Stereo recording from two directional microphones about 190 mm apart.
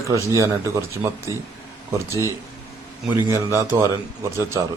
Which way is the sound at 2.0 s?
15° right (ahead or behind).